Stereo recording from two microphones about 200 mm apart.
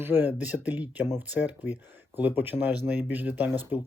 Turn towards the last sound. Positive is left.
turn(degrees=-10)  # may be behind; listen again after turning